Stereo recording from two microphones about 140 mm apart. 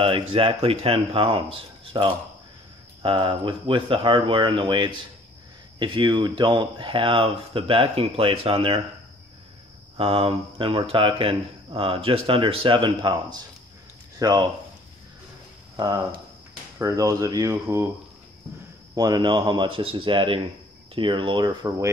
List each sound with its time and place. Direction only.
0.0 s speech: 40° right (ahead or behind)
9.9 s speech: 45° right (ahead or behind)
15.7 s speech: 30° right (ahead or behind)
18.9 s speech: 30° right (ahead or behind)